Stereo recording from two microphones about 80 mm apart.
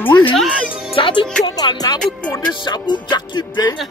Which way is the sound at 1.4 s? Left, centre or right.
Left.